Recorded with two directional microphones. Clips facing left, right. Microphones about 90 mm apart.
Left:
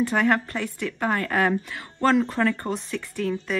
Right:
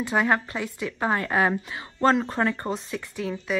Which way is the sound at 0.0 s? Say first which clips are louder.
Left 2 dB; 15° right (ahead or behind).